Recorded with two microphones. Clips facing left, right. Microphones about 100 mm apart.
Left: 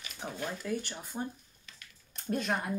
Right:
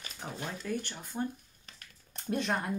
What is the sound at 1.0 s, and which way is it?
Speech, 15° left (ahead or behind).